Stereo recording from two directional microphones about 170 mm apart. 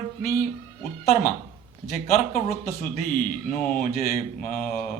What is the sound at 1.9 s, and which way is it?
Speech, 45° left (ahead or behind).